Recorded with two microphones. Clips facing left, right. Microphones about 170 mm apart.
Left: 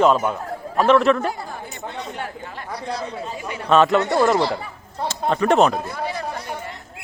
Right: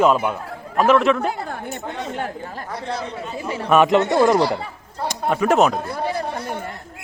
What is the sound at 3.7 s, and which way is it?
Speech, 15° right (ahead or behind).